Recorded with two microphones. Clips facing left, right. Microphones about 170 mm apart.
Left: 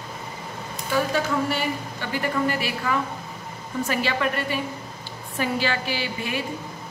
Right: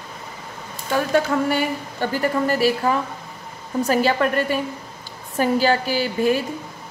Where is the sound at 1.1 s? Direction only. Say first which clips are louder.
Right 5 dB; 50° right (ahead or behind).